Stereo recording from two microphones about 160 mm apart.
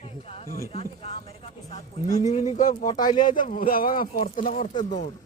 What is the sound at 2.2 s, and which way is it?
Speech, 45° left (ahead or behind).